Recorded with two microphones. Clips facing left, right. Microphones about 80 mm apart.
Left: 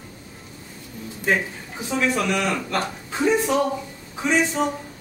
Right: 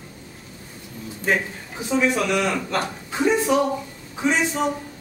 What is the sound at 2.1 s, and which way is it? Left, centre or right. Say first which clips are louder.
A man's voice: right 1 dB; centre.